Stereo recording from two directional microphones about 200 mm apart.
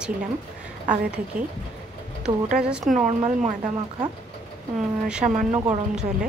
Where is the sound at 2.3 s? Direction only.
15° right (ahead or behind).